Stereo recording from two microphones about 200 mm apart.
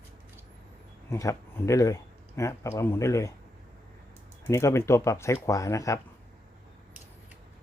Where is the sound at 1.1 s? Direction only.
15° left (ahead or behind).